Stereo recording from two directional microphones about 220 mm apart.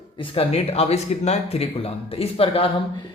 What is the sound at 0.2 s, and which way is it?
A man's voice, 25° left (ahead or behind).